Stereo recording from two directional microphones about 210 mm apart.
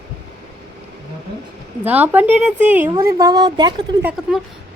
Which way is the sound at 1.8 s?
10° right (ahead or behind).